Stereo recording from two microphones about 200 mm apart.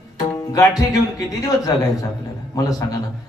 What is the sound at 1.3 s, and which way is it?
A man's voice, 15° left (ahead or behind).